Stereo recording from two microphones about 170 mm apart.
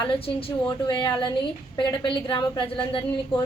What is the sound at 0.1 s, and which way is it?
A woman's voice, 35° left (ahead or behind).